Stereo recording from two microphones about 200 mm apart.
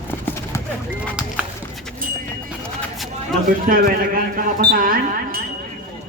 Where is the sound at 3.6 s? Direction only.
45° right (ahead or behind).